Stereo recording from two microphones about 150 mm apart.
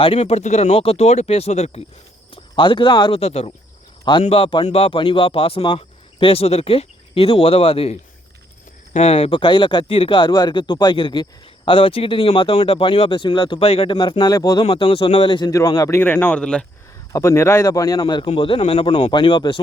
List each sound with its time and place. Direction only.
0.0 s speech: 40° left (ahead or behind)
2.3 s speech: 35° left (ahead or behind)
3.2 s speech: 40° left (ahead or behind); by 14.6 s 25° left (ahead or behind)
14.6 s speech: 35° left (ahead or behind); by 16.6 s 5° left (ahead or behind)
17.1 s speech: 20° left (ahead or behind)